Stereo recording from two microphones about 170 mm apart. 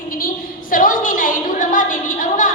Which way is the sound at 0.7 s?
55° left (ahead or behind).